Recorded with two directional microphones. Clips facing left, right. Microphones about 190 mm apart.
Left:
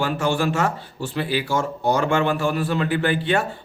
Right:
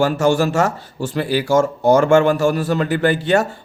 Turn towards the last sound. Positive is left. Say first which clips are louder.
# right 5 dB
turn(degrees=-40)  # may be behind; listen again after turning